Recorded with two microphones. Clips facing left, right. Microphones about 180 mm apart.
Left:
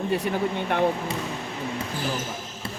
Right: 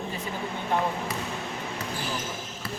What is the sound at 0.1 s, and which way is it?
Speech, 70° left (ahead or behind).